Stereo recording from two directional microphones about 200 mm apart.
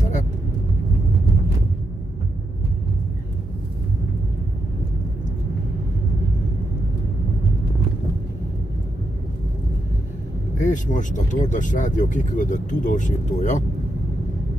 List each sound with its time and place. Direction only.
10.6 s speech: 40° left (ahead or behind)